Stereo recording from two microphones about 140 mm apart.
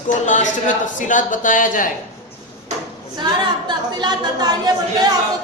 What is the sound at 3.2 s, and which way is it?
A woman's voice, 30° right (ahead or behind).